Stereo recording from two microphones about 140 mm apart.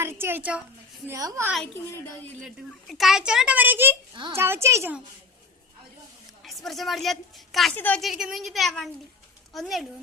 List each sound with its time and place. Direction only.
0.0 s a woman's voice: 15° right (ahead or behind)
1.0 s a woman's voice: 25° right (ahead or behind)
2.4 s a woman's voice: centre (ahead or behind)
4.1 s a woman's voice: 35° right (ahead or behind)
4.4 s a woman's voice: 15° right (ahead or behind)
6.4 s a woman's voice: centre (ahead or behind)
7.8 s a woman's voice: 10° left (ahead or behind)
8.0 s a woman's voice: centre (ahead or behind)